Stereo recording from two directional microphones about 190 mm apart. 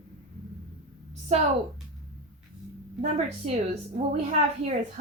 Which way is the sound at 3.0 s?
35° right (ahead or behind).